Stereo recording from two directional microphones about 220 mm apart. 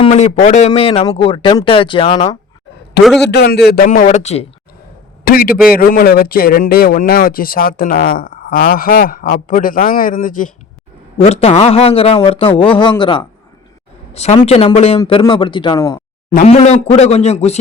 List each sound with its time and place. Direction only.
0.0 s a man's voice: 30° left (ahead or behind)
3.2 s speech: 50° left (ahead or behind); by 4.4 s 30° left (ahead or behind)
5.2 s a man's voice: 40° left (ahead or behind); by 16.0 s 15° left (ahead or behind)
16.3 s a man's voice: 30° left (ahead or behind)